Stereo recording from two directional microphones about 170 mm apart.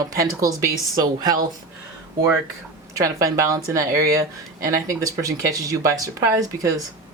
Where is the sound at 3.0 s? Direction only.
20° right (ahead or behind).